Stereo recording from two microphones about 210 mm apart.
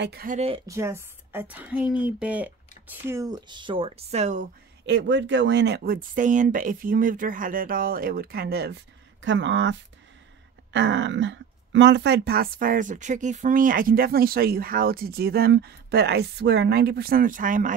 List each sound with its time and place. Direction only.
0.0 s speech: 45° right (ahead or behind)
0.7 s a woman's voice: 15° right (ahead or behind); by 4.5 s 35° right (ahead or behind)
4.8 s speech: 60° right (ahead or behind)
9.2 s speech: 60° right (ahead or behind); by 17.7 s 40° right (ahead or behind)